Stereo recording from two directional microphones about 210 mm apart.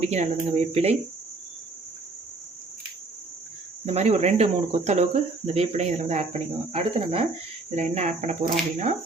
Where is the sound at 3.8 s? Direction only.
30° right (ahead or behind).